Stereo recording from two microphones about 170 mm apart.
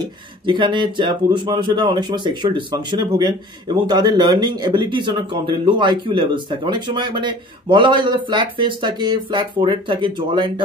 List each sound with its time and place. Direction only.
0.0 s speech: 25° right (ahead or behind)